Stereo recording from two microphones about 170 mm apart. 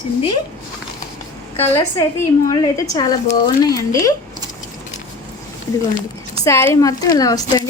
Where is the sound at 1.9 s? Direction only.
20° left (ahead or behind).